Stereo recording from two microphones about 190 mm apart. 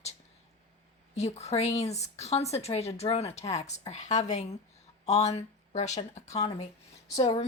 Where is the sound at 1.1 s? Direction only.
35° left (ahead or behind).